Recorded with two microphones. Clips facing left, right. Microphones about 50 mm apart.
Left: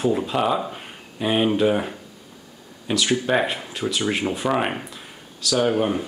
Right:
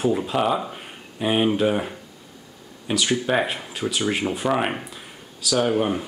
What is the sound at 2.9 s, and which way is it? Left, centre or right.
Speech, centre.